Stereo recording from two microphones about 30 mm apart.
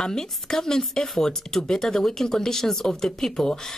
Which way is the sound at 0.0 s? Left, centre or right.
Left.